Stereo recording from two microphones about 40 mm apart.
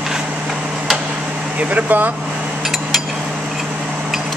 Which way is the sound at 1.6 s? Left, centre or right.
Right.